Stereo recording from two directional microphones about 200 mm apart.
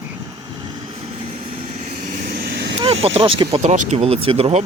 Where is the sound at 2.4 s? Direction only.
60° right (ahead or behind).